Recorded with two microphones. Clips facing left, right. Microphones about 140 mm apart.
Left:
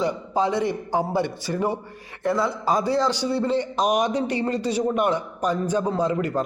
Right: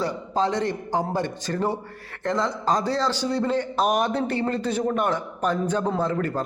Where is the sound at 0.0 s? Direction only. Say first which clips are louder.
Left 1 dB; 10° left (ahead or behind).